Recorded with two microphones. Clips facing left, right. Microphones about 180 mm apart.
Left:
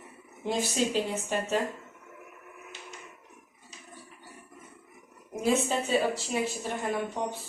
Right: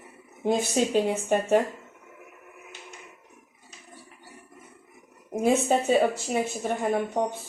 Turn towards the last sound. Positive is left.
turn(degrees=-55)  # may be behind; listen again after turning